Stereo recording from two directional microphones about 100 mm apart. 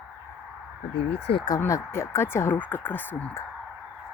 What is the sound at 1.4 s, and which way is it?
Speech, 30° left (ahead or behind).